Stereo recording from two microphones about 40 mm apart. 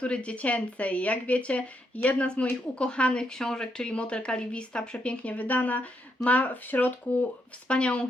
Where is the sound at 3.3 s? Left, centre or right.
Centre; by 6.9 s left.